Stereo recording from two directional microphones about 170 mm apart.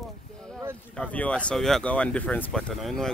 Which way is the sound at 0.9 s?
5° left (ahead or behind).